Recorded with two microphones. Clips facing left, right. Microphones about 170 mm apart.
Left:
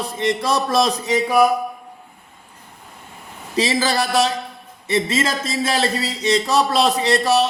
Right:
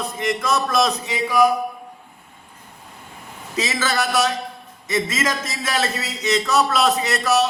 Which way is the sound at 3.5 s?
30° left (ahead or behind).